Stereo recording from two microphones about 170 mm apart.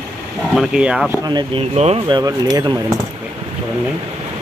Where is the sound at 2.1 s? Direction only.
25° right (ahead or behind).